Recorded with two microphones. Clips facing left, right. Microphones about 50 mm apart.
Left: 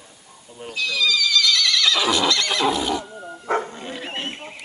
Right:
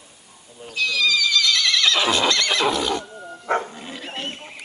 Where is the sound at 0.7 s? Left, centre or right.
Right.